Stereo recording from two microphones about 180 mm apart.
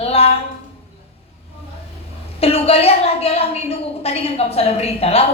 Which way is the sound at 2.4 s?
35° left (ahead or behind).